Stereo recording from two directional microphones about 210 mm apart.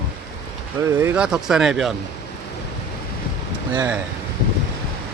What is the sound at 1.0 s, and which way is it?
Speech, 5° right (ahead or behind).